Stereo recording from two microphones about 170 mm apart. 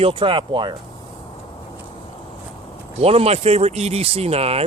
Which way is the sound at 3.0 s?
35° right (ahead or behind).